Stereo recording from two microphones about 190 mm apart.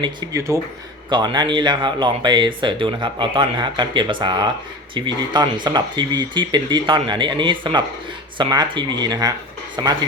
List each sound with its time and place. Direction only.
0.0 s speech: 20° right (ahead or behind)